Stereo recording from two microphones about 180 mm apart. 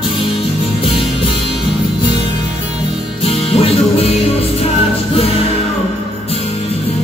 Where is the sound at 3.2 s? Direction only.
30° left (ahead or behind).